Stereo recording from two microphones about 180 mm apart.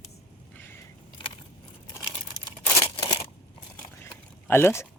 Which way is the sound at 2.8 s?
25° left (ahead or behind).